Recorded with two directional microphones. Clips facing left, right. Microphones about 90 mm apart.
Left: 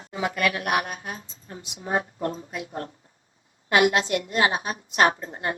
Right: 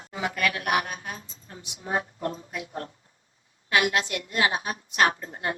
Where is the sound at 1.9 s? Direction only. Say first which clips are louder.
Left 2 dB; 35° left (ahead or behind).